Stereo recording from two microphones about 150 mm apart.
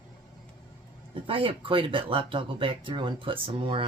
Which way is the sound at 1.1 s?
35° right (ahead or behind).